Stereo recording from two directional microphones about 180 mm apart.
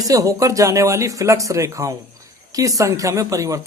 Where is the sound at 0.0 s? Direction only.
20° right (ahead or behind).